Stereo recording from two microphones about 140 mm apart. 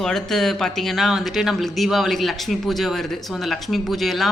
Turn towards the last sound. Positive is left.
turn(degrees=0)  # may be behind; listen again after turning